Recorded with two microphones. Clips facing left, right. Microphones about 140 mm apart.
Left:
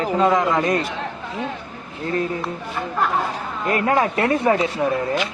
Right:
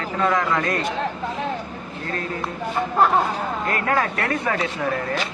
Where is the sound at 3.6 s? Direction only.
20° left (ahead or behind).